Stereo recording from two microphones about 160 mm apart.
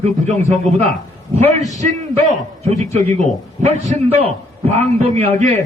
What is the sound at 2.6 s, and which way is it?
A man's voice, 45° right (ahead or behind).